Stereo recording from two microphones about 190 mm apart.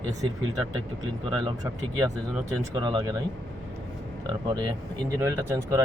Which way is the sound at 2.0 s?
20° right (ahead or behind).